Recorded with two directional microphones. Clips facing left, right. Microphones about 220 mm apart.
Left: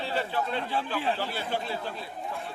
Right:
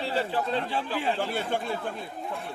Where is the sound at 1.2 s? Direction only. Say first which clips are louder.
Right 3 dB; 50° right (ahead or behind).